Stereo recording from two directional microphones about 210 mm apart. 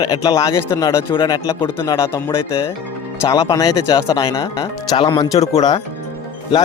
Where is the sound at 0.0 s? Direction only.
15° left (ahead or behind).